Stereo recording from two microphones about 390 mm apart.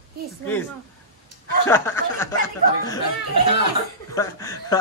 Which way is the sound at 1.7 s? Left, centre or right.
Centre.